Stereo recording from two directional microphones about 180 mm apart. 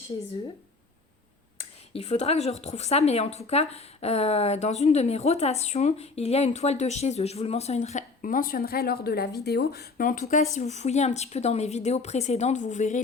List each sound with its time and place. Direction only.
1.9 s speech: 35° left (ahead or behind)